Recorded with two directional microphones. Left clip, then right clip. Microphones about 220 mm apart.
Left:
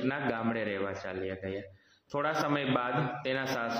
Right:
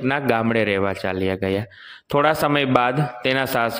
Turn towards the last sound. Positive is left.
turn(degrees=-45)  # may be behind; listen again after turning